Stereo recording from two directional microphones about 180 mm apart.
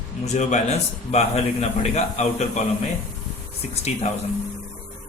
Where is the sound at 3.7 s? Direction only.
35° left (ahead or behind).